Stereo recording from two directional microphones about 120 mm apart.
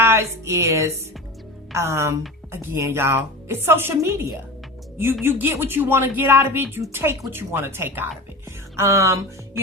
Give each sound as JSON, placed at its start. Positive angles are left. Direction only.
{"t": 0.0, "sound": "a woman's voice", "side_deg": -20}